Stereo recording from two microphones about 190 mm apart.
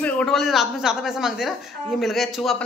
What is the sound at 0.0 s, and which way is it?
A woman's voice, centre (ahead or behind).